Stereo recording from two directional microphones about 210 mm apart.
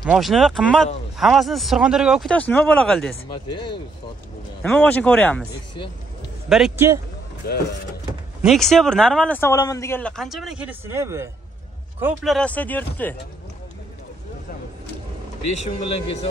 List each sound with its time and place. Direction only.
0.0 s speech: centre (ahead or behind)
4.6 s speech: 10° left (ahead or behind)
6.5 s speech: centre (ahead or behind)
7.4 s speech: 50° left (ahead or behind)
8.5 s speech: centre (ahead or behind)
12.4 s speech: 5° left (ahead or behind)